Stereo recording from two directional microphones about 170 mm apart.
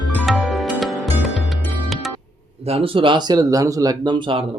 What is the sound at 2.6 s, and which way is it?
Speech, 35° right (ahead or behind).